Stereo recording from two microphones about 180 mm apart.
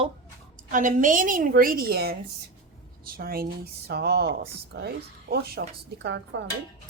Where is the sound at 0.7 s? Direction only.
45° right (ahead or behind).